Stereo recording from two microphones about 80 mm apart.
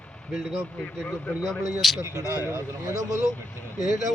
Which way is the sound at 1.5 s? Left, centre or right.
Centre.